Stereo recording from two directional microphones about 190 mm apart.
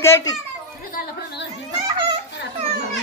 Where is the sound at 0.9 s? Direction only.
60° left (ahead or behind).